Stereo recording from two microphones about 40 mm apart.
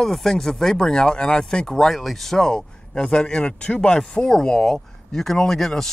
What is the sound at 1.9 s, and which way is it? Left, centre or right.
Speech, centre.